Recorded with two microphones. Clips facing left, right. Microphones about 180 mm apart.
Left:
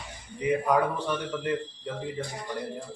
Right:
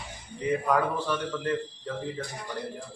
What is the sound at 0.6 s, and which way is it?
A man's voice, 15° left (ahead or behind).